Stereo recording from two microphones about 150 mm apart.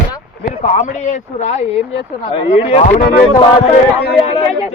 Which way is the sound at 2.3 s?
40° left (ahead or behind).